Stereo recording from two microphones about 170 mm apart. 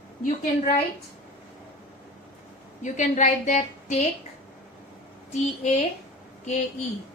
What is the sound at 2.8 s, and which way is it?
A woman's voice, 45° left (ahead or behind).